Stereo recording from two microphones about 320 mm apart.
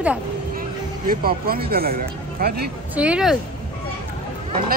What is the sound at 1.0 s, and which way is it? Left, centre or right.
Speech, right.